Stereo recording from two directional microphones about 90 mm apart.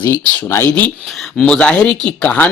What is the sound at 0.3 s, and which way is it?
Speech, 20° left (ahead or behind).